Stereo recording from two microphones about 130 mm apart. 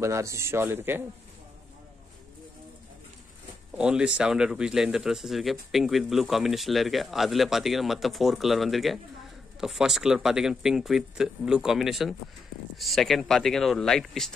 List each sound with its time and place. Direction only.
0.0 s a man's voice: 20° right (ahead or behind)
3.7 s speech: 10° right (ahead or behind)